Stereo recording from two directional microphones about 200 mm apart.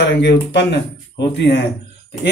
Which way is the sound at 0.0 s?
60° left (ahead or behind).